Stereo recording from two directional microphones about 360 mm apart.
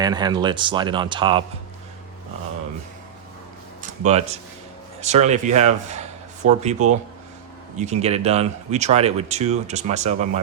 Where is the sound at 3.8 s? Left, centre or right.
Centre.